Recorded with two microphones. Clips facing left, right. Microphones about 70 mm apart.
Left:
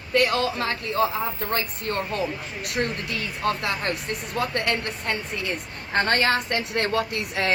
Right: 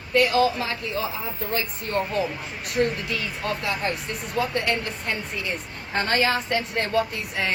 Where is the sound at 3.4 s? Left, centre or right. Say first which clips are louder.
Left 3 dB; left.